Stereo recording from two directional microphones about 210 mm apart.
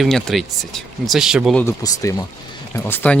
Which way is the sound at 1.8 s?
15° left (ahead or behind).